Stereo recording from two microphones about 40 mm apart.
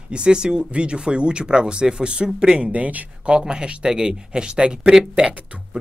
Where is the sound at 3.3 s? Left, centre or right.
Right.